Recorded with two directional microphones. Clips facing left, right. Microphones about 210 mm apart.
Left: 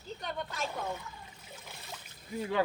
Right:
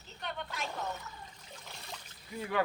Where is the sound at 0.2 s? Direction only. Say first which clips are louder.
Left 1 dB; 40° left (ahead or behind).